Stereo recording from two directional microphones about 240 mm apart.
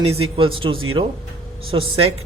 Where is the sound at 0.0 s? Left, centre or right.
Right.